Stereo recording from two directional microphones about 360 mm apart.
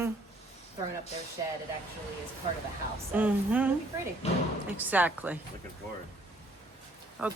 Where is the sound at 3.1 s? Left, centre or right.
Centre.